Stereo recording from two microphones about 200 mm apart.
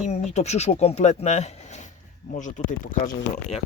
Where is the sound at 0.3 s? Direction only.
35° left (ahead or behind).